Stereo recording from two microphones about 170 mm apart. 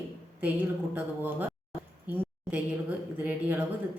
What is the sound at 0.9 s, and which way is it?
A woman's voice, 10° right (ahead or behind).